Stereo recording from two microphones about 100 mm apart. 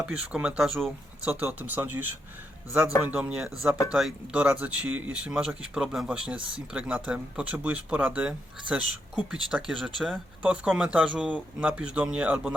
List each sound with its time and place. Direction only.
0.0 s speech: 10° right (ahead or behind)